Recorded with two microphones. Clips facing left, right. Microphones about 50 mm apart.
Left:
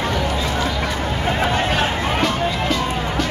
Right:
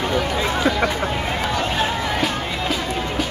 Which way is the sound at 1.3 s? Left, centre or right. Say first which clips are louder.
Left 3 dB; left.